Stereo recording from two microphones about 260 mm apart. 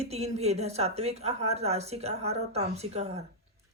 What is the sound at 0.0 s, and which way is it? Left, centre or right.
Speech, right.